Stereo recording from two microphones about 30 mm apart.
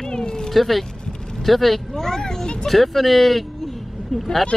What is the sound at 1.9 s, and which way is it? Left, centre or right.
Speech, centre.